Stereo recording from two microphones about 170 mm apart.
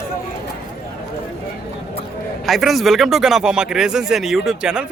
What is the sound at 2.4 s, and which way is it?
Speech, centre (ahead or behind).